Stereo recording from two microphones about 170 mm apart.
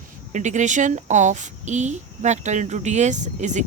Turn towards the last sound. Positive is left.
turn(degrees=-45)  # may be behind; listen again after turning